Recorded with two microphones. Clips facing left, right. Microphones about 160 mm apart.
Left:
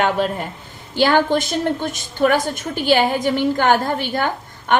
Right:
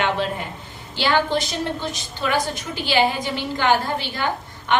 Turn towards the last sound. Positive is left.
turn(degrees=50)  # may be behind; listen again after turning